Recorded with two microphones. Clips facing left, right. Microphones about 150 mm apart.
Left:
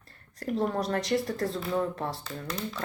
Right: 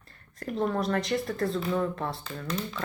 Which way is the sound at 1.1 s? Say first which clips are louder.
Even; 20° left (ahead or behind).